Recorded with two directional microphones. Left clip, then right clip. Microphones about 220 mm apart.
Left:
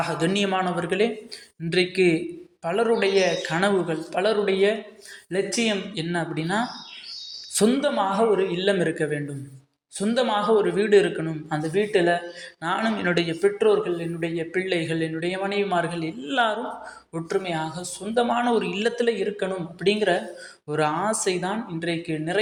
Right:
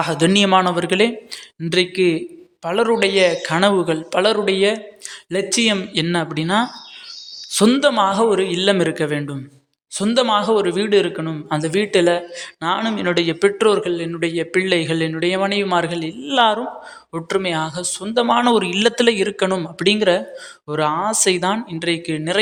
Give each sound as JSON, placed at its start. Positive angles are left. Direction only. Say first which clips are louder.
{"t": 0.0, "sound": "a man's voice", "louder": "right 7 dB", "side_deg": -35}
{"t": 7.7, "sound": "a man's voice", "louder": "right 7 dB", "side_deg": -40}
{"t": 11.5, "sound": "a man's voice", "louder": "right 5 dB", "side_deg": -40}
{"t": 12.6, "sound": "a man's voice", "louder": "right 4 dB", "side_deg": -20}
{"t": 13.4, "sound": "a man's voice", "louder": "right 4 dB", "side_deg": -35}
{"t": 20.7, "sound": "a man's voice", "louder": "right 4 dB", "side_deg": -20}
{"t": 21.2, "sound": "a man's voice", "louder": "right 8 dB", "side_deg": -35}